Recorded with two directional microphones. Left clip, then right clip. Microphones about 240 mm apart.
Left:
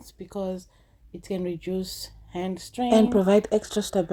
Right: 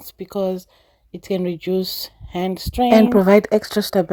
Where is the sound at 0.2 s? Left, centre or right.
Right.